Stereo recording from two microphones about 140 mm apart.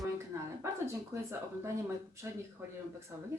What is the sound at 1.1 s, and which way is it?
Speech, 15° right (ahead or behind).